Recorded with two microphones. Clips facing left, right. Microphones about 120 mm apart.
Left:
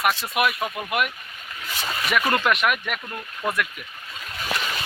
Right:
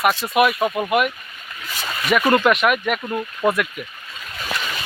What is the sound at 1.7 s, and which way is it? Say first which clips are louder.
Speech: right 1 dB; 25° left (ahead or behind).